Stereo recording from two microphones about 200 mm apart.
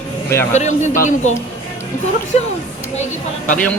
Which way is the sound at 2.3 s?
35° left (ahead or behind).